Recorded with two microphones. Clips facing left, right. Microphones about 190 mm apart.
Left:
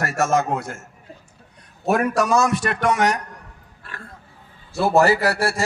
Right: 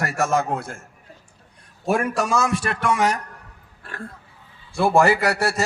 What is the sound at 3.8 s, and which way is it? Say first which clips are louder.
Speech: right 5 dB; 40° right (ahead or behind).